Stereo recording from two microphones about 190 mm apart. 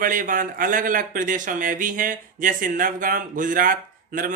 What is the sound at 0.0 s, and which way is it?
Speech, 45° right (ahead or behind).